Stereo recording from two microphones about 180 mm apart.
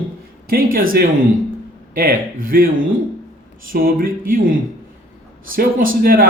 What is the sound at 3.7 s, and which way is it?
Speech, 55° right (ahead or behind).